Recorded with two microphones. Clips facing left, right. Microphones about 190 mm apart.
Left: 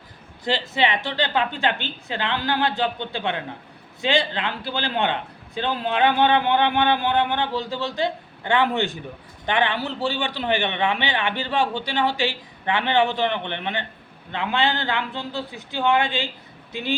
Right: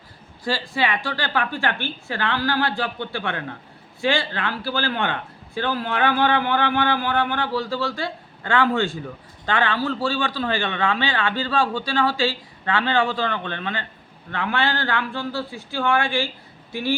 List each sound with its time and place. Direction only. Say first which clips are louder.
0.4 s speech: left 1 dB; 20° left (ahead or behind)